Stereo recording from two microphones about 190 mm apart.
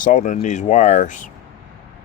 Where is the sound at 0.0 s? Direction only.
45° left (ahead or behind).